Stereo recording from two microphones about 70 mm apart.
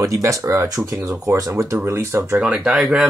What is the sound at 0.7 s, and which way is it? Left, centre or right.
Speech, right.